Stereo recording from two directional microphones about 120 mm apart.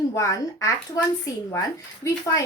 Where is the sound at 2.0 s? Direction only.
30° left (ahead or behind).